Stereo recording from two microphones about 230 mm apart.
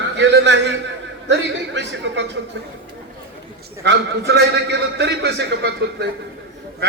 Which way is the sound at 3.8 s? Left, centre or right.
Right.